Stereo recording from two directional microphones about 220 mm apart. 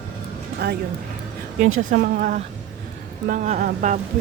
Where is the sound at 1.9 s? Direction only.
35° right (ahead or behind).